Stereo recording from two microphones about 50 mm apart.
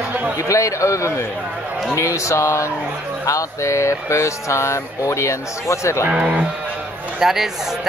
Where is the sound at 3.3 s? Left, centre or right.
Left.